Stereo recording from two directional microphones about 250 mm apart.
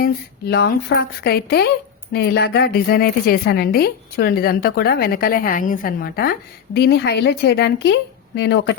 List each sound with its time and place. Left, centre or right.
0.0 s a woman's voice: left